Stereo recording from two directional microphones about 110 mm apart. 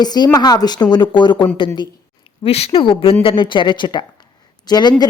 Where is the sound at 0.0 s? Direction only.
40° left (ahead or behind).